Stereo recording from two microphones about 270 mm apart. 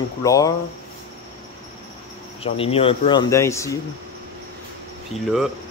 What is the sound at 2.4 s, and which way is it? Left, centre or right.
Speech, left.